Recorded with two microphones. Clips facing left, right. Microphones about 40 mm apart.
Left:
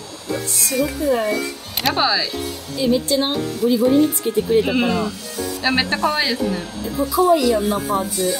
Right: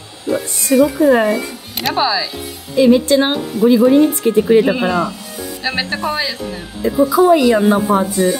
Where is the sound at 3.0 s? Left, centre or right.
Right.